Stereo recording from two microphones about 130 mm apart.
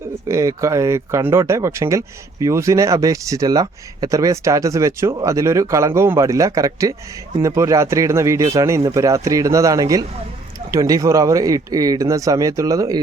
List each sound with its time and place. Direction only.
0.3 s speech: 25° right (ahead or behind)